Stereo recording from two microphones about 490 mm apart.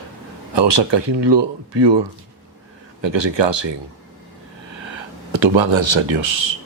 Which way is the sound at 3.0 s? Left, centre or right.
Right.